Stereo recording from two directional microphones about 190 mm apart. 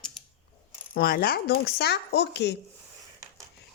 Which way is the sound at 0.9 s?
50° left (ahead or behind).